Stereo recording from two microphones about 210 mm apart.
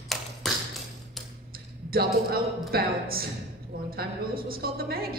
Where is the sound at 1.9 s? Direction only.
45° right (ahead or behind).